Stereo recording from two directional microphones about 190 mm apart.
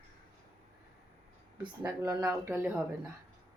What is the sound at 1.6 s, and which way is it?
Speech, 15° right (ahead or behind).